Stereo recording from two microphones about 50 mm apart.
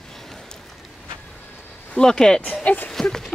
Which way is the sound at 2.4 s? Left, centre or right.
Left.